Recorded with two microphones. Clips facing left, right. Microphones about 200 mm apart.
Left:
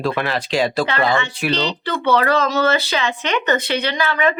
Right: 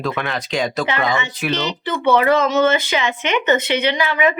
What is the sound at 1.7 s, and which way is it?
Speech, 10° right (ahead or behind).